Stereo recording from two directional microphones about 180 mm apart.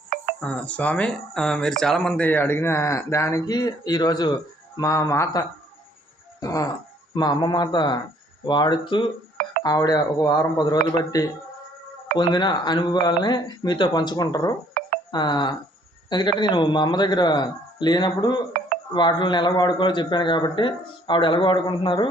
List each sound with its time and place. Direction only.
0.3 s a man's voice: 5° left (ahead or behind); by 22.1 s 25° left (ahead or behind)